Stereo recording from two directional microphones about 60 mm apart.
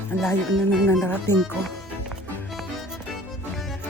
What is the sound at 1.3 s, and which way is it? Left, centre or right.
Speech, left.